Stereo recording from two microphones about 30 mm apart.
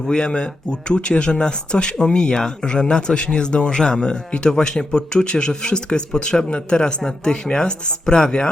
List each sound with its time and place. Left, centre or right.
0.1 s speech: left